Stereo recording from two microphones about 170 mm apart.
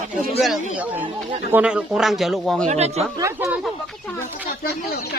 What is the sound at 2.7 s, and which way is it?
Speech, 40° right (ahead or behind).